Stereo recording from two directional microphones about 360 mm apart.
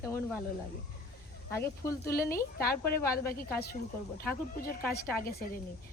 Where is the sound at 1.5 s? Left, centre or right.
Centre.